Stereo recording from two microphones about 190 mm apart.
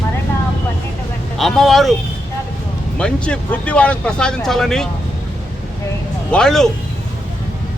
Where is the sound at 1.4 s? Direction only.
Centre (ahead or behind).